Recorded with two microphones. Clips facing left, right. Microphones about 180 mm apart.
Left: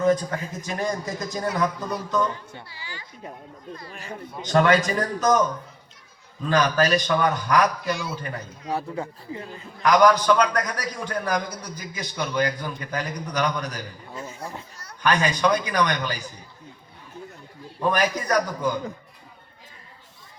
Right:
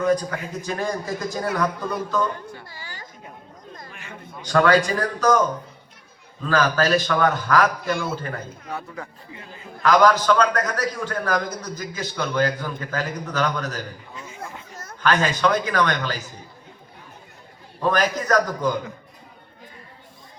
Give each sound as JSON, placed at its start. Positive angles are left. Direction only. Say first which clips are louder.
{"t": 0.0, "sound": "a man's voice", "louder": "even", "side_deg": 25}
{"t": 2.6, "sound": "a woman's voice", "louder": "right 1 dB", "side_deg": -45}
{"t": 3.9, "sound": "speech", "louder": "left 4 dB", "side_deg": 35}
{"t": 4.4, "sound": "a man's voice", "louder": "right 1 dB", "side_deg": 25}
{"t": 6.5, "sound": "a man's voice", "louder": "right 1 dB", "side_deg": 15}
{"t": 7.9, "sound": "a woman's voice", "louder": "right 3 dB", "side_deg": -50}
{"t": 8.7, "sound": "speech", "louder": "left 6 dB", "side_deg": 35}
{"t": 9.8, "sound": "a man's voice", "louder": "even", "side_deg": 15}
{"t": 14.2, "sound": "a sound", "louder": "left 3 dB", "side_deg": 40}
{"t": 15.0, "sound": "a man's voice", "louder": "right 1 dB", "side_deg": 15}
{"t": 17.7, "sound": "a man's voice", "louder": "right 1 dB", "side_deg": 10}